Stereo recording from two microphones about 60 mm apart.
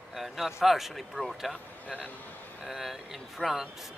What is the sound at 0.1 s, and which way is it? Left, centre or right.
A man's voice, centre.